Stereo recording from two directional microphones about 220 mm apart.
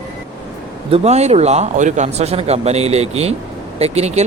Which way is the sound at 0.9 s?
30° right (ahead or behind).